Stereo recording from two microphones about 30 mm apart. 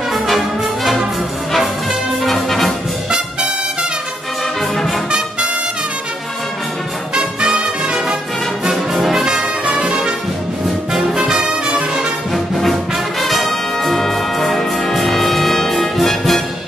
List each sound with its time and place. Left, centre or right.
2.2 s music: centre
4.7 s brass instrument: centre
8.6 s music: centre
9.2 s brass instrument: centre
11.4 s brass instrument: right
12.5 s brass instrument: centre